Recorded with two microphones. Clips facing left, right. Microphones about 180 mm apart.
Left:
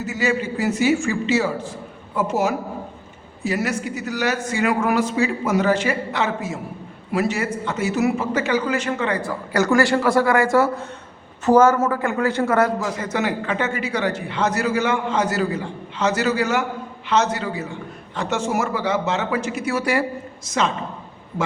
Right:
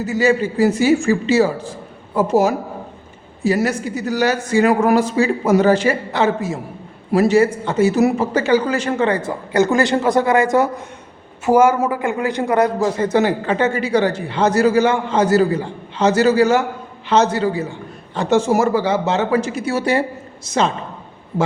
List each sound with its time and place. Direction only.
0.1 s a man's voice: 35° right (ahead or behind); by 12.7 s 15° right (ahead or behind)
12.8 s a man's voice: 30° right (ahead or behind)